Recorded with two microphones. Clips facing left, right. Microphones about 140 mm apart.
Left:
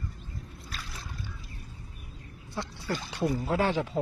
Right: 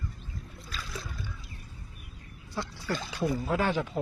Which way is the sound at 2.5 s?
25° left (ahead or behind).